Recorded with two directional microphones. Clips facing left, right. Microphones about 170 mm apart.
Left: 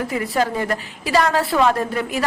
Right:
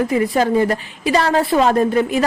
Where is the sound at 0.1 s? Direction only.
25° right (ahead or behind).